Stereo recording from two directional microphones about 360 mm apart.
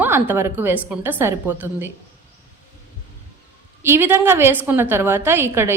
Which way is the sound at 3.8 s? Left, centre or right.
Centre.